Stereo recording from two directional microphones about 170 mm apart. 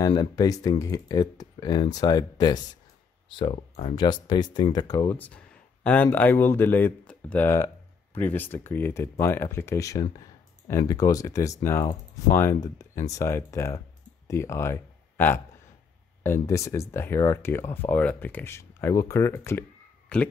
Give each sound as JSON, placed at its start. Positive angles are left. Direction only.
{"t": 0.0, "sound": "speech", "side_deg": 20}
{"t": 5.1, "sound": "speech", "side_deg": 10}